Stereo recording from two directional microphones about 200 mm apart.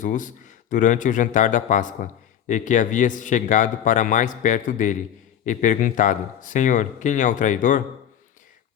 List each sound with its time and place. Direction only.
0.0 s speech: 40° left (ahead or behind)